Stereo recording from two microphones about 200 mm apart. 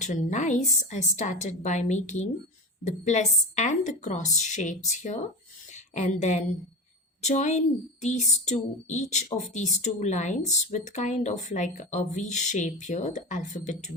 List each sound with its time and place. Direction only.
0.0 s speech: 35° left (ahead or behind)